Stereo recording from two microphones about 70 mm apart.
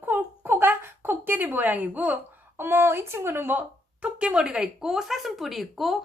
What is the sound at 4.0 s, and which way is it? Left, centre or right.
A woman's voice, centre.